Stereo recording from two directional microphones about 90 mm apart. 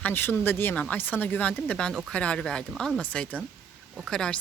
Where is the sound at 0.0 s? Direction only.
25° left (ahead or behind).